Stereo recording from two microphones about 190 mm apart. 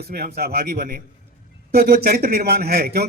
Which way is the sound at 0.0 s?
55° right (ahead or behind).